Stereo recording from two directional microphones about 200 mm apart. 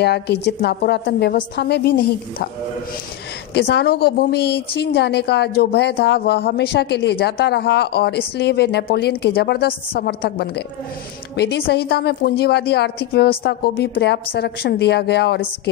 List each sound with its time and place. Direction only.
0.0 s a woman's voice: 55° left (ahead or behind)
3.5 s a woman's voice: 55° left (ahead or behind)